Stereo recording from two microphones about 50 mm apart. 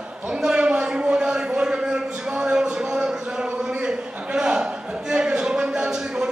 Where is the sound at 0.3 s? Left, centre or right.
Centre.